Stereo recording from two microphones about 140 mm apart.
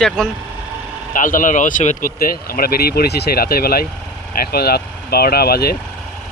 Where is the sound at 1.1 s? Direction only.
75° left (ahead or behind); by 5.5 s 90° left.